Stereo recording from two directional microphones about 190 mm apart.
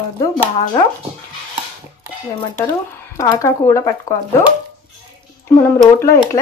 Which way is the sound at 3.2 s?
15° left (ahead or behind).